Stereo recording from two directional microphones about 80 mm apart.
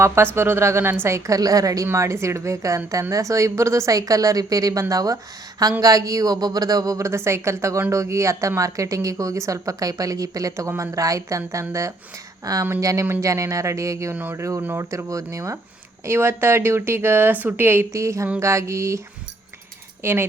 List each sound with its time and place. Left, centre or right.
0.0 s a woman's voice: right
1.4 s speech: right
1.9 s a woman's voice: right
16.0 s a woman's voice: right
17.9 s a woman's voice: right